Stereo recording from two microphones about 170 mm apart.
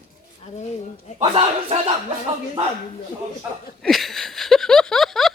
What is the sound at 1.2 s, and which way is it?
Speech, 35° right (ahead or behind).